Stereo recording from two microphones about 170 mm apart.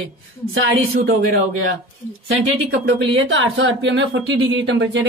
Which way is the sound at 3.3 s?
90° right.